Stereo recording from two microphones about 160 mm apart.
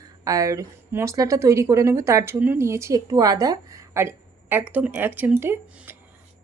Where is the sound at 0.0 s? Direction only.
20° right (ahead or behind).